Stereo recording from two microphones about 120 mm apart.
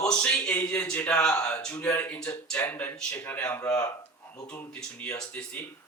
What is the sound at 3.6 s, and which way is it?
Speech, 30° left (ahead or behind).